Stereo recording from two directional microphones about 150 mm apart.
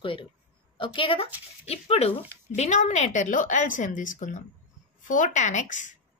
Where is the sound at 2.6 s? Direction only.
50° left (ahead or behind).